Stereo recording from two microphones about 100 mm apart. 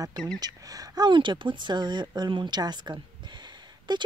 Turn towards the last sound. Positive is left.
turn(degrees=-50)  # may be behind; listen again after turning